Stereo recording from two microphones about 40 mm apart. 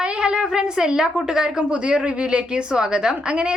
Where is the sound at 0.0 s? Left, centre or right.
Right.